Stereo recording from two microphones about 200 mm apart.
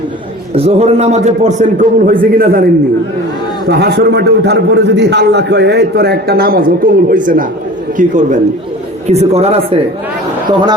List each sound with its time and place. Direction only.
0.5 s a man's voice: 30° right (ahead or behind); by 2.6 s 45° right (ahead or behind)
3.7 s a man's voice: 55° right (ahead or behind); by 9.8 s 30° right (ahead or behind)